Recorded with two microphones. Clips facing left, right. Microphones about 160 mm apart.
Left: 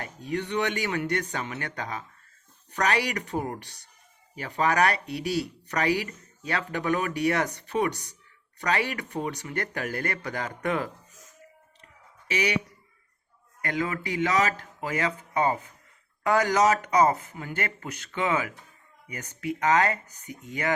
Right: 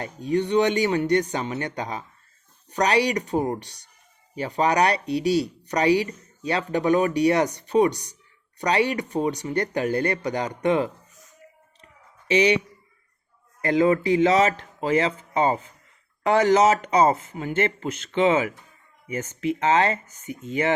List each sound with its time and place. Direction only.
0.3 s speech: 30° right (ahead or behind)
3.2 s speech: 20° right (ahead or behind)
12.3 s speech: 25° right (ahead or behind)